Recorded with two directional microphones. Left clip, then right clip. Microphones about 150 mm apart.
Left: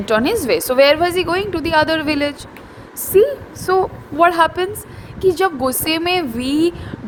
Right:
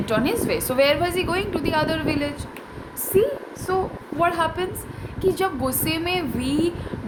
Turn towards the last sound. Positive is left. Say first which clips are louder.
# left 6 dB
turn(degrees=55)  # may be behind; listen again after turning